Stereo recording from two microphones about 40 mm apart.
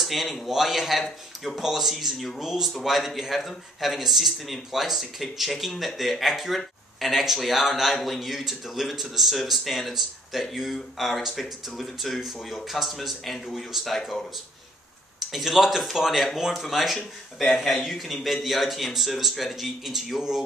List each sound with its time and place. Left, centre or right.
0.0 s a man's voice: centre
2.4 s speech: centre
15.3 s speech: centre